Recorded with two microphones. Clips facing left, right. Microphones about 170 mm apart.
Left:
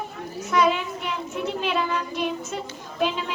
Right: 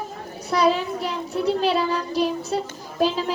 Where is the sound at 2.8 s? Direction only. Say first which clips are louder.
Right 2 dB; 35° right (ahead or behind).